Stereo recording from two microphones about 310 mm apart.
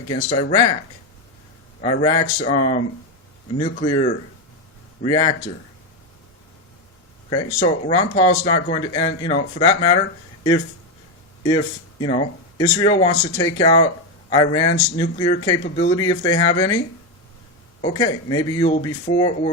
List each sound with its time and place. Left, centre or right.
0.1 s speech: centre
1.8 s speech: centre
7.3 s speech: centre
11.4 s speech: centre
17.9 s speech: centre